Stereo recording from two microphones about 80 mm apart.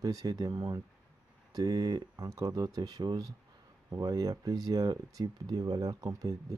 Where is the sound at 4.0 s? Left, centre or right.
Right.